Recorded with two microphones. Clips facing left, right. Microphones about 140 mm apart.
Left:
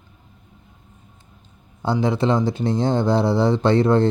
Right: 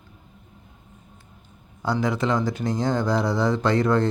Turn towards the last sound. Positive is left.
turn(degrees=25)  # may be behind; listen again after turning